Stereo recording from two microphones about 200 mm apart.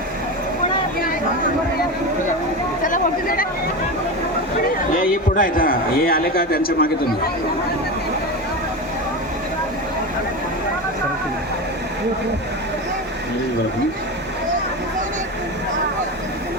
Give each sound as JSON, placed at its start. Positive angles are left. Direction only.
{"t": 2.8, "sound": "a man's voice", "side_deg": 45}
{"t": 4.9, "sound": "a man's voice", "side_deg": 45}